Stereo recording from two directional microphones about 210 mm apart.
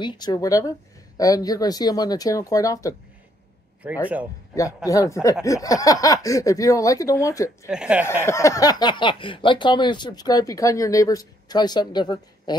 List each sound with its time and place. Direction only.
0.0 s speech: 20° left (ahead or behind)
4.8 s speech: 15° left (ahead or behind)
7.6 s speech: 5° right (ahead or behind)
8.2 s speech: 15° left (ahead or behind)